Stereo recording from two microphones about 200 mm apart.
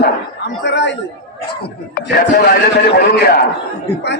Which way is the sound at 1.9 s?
50° left (ahead or behind).